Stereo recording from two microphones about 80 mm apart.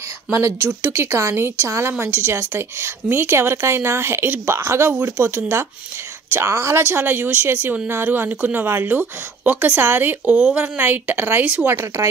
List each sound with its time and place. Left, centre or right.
0.8 s speech: right
10.2 s speech: centre
10.6 s speech: right